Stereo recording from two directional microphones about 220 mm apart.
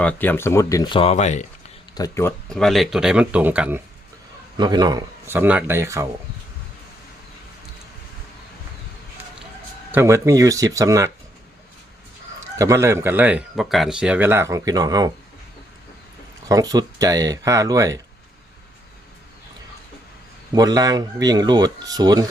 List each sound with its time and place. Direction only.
0.0 s speech: 5° left (ahead or behind); by 1.5 s 30° left (ahead or behind)
2.0 s speech: 10° left (ahead or behind); by 3.8 s 5° right (ahead or behind)
4.5 s speech: 20° right (ahead or behind)
9.9 s speech: 10° right (ahead or behind)
12.4 s speech: 15° right (ahead or behind)
16.5 s speech: 15° right (ahead or behind)
20.6 s speech: 15° right (ahead or behind)